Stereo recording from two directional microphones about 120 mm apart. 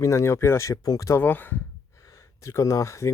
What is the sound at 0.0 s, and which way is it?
Speech, 25° left (ahead or behind).